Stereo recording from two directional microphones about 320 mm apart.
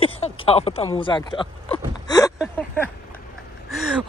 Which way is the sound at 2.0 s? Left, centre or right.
Centre.